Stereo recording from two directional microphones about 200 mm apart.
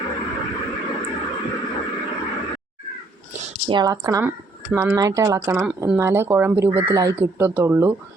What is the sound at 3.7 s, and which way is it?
Speech, 20° right (ahead or behind).